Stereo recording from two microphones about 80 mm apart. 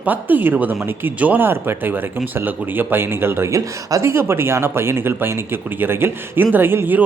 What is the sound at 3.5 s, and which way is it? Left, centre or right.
Speech, right.